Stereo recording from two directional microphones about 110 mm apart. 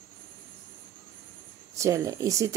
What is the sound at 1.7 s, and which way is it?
Speech, 30° right (ahead or behind).